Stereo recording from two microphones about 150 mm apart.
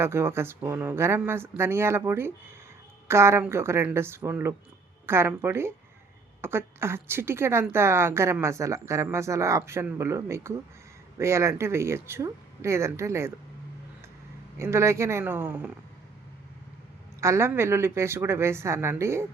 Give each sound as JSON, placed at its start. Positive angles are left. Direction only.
{"t": 0.0, "sound": "a woman's voice", "side_deg": -15}
{"t": 14.6, "sound": "a woman's voice", "side_deg": -20}
{"t": 17.2, "sound": "a woman's voice", "side_deg": -20}